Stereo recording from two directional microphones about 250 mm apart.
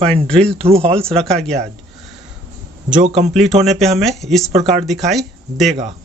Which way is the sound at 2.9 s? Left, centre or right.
Right.